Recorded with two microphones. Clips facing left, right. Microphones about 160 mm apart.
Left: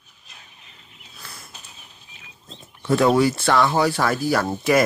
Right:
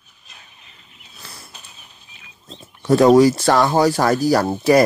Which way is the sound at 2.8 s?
40° right (ahead or behind).